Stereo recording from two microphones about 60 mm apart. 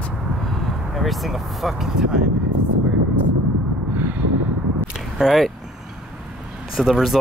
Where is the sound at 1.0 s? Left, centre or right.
Centre.